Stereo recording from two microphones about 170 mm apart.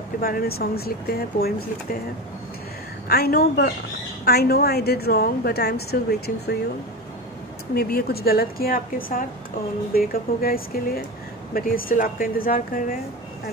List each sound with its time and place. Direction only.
0.2 s speech: 60° left (ahead or behind)
3.1 s a woman's voice: 65° left (ahead or behind)
7.7 s speech: 65° left (ahead or behind)